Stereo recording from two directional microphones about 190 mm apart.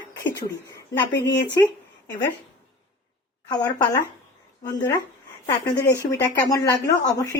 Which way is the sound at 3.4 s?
20° left (ahead or behind).